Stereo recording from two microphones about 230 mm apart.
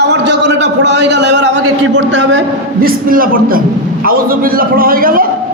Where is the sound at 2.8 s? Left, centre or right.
Right.